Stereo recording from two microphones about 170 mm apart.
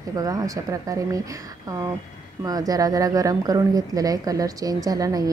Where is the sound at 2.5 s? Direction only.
20° right (ahead or behind).